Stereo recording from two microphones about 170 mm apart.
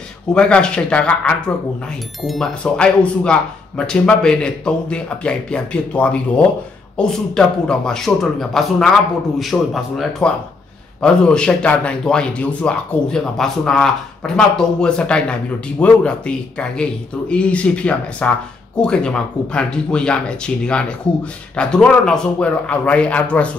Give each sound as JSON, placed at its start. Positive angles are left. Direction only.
{"t": 0.3, "sound": "speech", "side_deg": 5}